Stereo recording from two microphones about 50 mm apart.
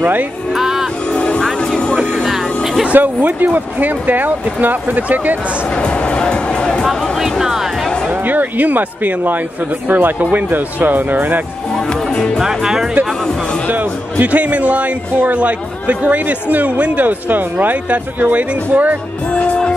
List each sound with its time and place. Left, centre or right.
0.0 s a man's voice: right
0.6 s music: centre
1.1 s music: left
2.1 s vehicle: centre
2.9 s a man's voice: right
5.8 s music: centre
6.8 s music: centre
8.1 s a man's voice: right
12.4 s speech: centre
14.2 s a man's voice: right
19.3 s music: left